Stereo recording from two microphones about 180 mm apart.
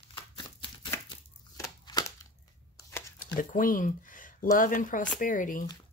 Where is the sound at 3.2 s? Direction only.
50° left (ahead or behind).